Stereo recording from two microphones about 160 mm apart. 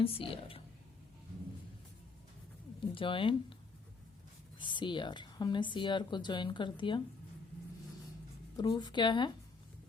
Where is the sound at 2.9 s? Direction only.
30° left (ahead or behind).